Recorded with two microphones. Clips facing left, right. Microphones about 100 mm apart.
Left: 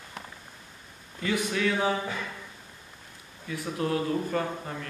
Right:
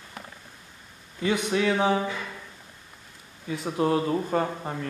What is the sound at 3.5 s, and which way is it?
Speech, 25° right (ahead or behind).